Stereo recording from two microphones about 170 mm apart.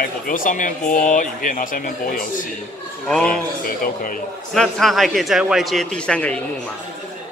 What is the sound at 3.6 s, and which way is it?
Speech, 55° left (ahead or behind).